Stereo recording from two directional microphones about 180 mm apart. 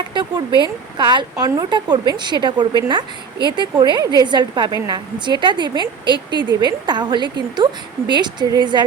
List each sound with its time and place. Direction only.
0.0 s a woman's voice: 25° right (ahead or behind)